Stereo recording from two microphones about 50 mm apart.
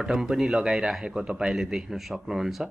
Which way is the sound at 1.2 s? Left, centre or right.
Right.